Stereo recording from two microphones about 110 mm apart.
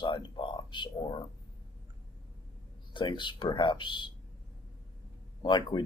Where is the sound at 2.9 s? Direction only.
45° left (ahead or behind).